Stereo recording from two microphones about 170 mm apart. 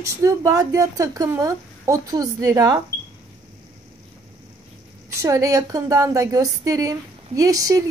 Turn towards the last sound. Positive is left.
turn(degrees=-20)  # may be behind; listen again after turning